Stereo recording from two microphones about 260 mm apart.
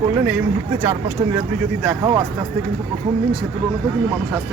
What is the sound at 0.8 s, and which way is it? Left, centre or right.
Speech, centre.